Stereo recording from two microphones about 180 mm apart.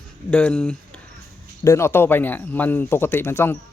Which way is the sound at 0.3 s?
5° left (ahead or behind).